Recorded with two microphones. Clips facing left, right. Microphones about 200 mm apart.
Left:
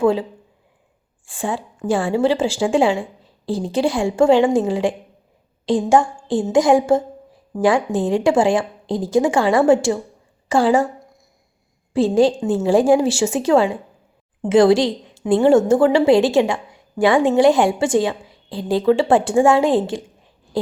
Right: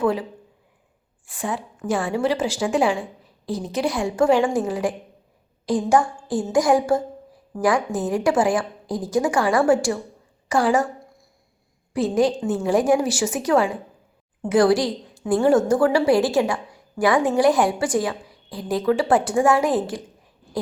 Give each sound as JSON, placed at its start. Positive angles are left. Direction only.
{"t": 0.0, "sound": "a woman's voice", "side_deg": 25}
{"t": 11.9, "sound": "a woman's voice", "side_deg": 30}